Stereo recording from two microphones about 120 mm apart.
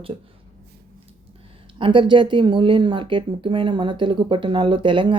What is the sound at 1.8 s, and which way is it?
Speech, 45° right (ahead or behind).